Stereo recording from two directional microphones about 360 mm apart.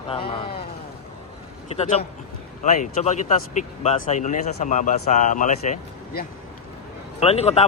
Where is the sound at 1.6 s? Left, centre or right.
Centre.